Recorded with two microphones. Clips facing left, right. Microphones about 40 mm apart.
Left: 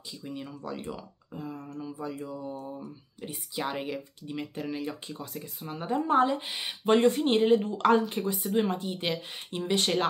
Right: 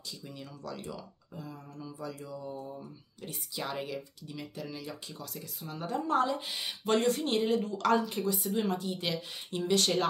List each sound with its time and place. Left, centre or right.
0.2 s speech: left